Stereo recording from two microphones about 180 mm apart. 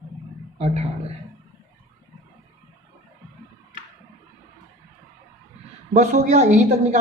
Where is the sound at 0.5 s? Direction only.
35° right (ahead or behind).